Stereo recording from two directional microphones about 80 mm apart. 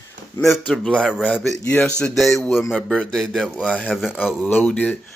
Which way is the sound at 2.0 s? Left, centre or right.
Centre.